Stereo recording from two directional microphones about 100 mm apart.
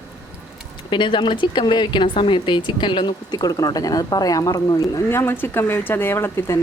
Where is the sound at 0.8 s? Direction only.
55° left (ahead or behind).